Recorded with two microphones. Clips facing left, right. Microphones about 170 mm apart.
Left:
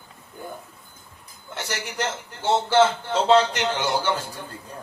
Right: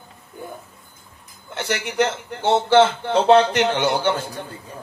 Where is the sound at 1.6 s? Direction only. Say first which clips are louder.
Right 8 dB; 60° right (ahead or behind).